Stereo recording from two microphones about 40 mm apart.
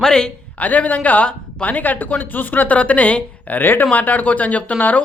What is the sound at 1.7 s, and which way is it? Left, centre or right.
Speech, left.